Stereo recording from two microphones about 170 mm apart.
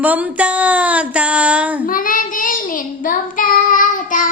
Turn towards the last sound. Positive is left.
turn(degrees=50)  # may be behind; listen again after turning